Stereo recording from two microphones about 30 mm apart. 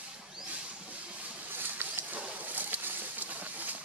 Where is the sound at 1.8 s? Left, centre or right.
Right.